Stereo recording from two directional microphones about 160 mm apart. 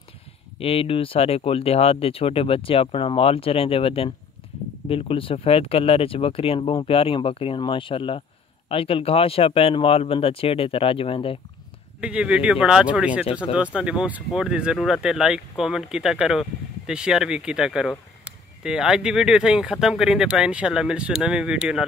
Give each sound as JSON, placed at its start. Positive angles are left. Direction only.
{"t": 0.6, "sound": "speech", "side_deg": 35}
{"t": 12.0, "sound": "speech", "side_deg": -5}